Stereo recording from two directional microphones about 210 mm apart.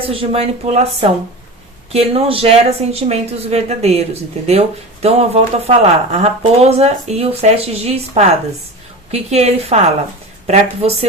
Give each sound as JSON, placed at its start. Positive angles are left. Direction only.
{"t": 0.0, "sound": "speech", "side_deg": -25}
{"t": 9.3, "sound": "a woman's voice", "side_deg": -30}